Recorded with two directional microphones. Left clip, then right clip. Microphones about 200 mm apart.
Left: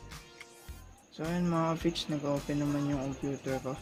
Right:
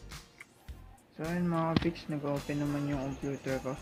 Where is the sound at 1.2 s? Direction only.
20° left (ahead or behind).